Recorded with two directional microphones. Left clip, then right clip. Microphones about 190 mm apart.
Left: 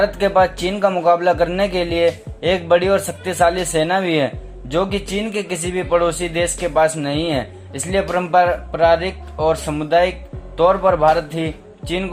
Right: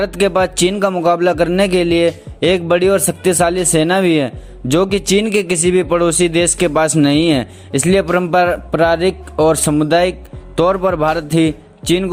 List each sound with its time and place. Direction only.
0.0 s speech: 35° right (ahead or behind)
4.7 s speech: 40° right (ahead or behind)